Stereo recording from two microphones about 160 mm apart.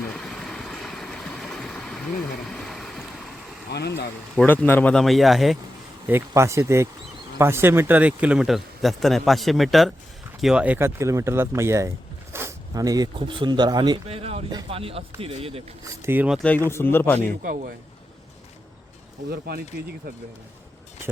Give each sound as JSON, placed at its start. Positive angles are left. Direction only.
{"t": 0.1, "sound": "vehicle", "side_deg": 5}
{"t": 2.5, "sound": "a sound", "side_deg": 0}
{"t": 3.7, "sound": "speech", "side_deg": 90}
{"t": 4.4, "sound": "a man's voice", "side_deg": 10}
{"t": 6.1, "sound": "a man's voice", "side_deg": -15}
{"t": 14.1, "sound": "a sound", "side_deg": -40}
{"t": 14.5, "sound": "speech", "side_deg": -35}
{"t": 16.0, "sound": "speech", "side_deg": -15}
{"t": 16.6, "sound": "speech", "side_deg": 15}
{"t": 17.2, "sound": "a man's voice", "side_deg": -55}
{"t": 19.3, "sound": "speech", "side_deg": -70}